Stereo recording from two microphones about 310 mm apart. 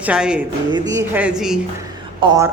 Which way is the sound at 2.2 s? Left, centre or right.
Centre.